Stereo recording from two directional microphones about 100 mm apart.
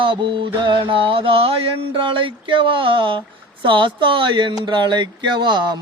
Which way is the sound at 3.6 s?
55° right (ahead or behind).